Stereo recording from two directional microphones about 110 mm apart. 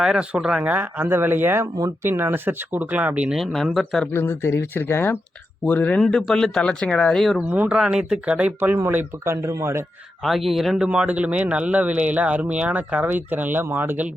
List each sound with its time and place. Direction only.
0.0 s speech: 5° right (ahead or behind)
3.3 s speech: centre (ahead or behind)
4.1 s speech: 20° left (ahead or behind); by 7.4 s centre (ahead or behind)
7.5 s speech: 10° right (ahead or behind)
10.2 s speech: centre (ahead or behind); by 14.1 s 15° right (ahead or behind)